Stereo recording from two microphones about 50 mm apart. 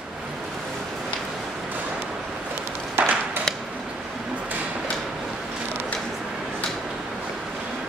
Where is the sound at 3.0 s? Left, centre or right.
Right.